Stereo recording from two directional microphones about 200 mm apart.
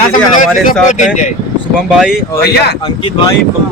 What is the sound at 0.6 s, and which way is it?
Speech, 40° left (ahead or behind).